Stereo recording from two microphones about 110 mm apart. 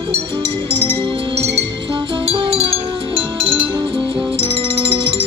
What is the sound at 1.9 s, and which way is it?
Music, 55° right (ahead or behind).